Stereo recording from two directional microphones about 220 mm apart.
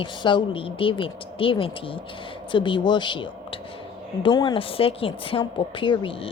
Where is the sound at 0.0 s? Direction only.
20° left (ahead or behind).